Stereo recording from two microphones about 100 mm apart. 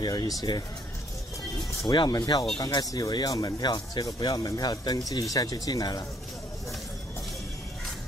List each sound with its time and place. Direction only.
0.0 s speech: 45° left (ahead or behind)
1.9 s speech: 45° left (ahead or behind)